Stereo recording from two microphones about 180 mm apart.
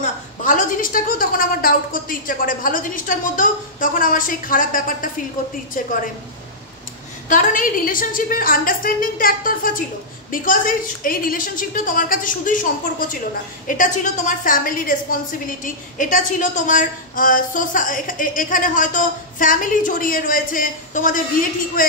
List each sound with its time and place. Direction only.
0.0 s a woman's voice: 45° left (ahead or behind)
7.2 s a woman's voice: 45° left (ahead or behind)